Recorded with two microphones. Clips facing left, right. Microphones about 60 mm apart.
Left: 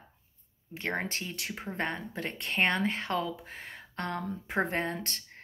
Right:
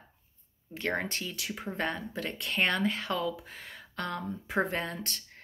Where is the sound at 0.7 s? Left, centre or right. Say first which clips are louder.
Right 1 dB; left.